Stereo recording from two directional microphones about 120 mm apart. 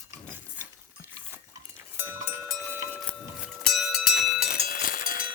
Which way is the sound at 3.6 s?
Centre (ahead or behind).